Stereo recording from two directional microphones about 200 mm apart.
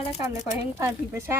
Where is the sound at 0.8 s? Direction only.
10° right (ahead or behind).